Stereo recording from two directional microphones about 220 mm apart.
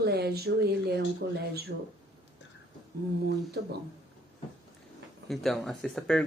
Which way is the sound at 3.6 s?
50° right (ahead or behind).